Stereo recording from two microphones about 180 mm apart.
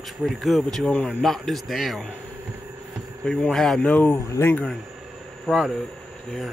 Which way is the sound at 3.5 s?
Centre (ahead or behind).